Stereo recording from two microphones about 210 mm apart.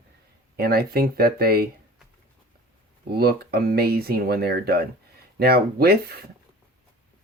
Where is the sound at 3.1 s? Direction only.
45° right (ahead or behind).